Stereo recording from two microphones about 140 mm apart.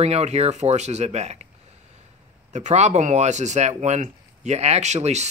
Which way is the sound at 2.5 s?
60° right (ahead or behind).